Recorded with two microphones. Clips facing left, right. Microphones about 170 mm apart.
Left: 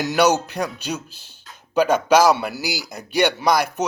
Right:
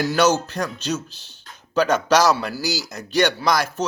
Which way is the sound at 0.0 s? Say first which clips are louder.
Left 1 dB; 15° left (ahead or behind).